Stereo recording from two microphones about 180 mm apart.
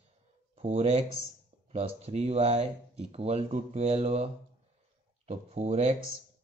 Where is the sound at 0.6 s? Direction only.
35° right (ahead or behind).